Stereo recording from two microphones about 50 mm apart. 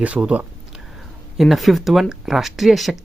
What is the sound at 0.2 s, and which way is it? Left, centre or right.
Speech, right.